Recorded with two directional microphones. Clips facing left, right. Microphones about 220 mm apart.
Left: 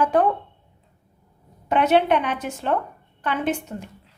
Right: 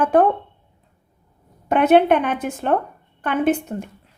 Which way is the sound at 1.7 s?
55° right (ahead or behind).